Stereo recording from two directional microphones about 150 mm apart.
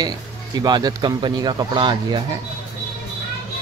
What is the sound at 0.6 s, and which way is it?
Speech, 30° right (ahead or behind).